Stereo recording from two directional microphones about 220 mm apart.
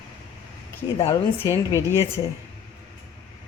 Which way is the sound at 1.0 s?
20° left (ahead or behind).